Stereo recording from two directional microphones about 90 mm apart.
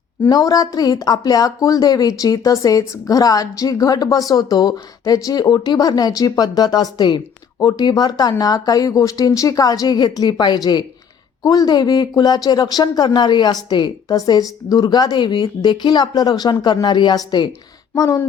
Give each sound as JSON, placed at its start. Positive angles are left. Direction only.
{"t": 0.3, "sound": "speech", "side_deg": 45}
{"t": 14.2, "sound": "speech", "side_deg": 45}
{"t": 17.9, "sound": "speech", "side_deg": 40}